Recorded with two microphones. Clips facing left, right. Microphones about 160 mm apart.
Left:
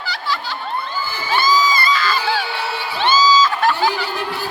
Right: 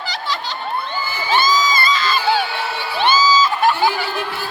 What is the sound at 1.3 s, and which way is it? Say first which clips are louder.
Crowd: even; 20° right (ahead or behind).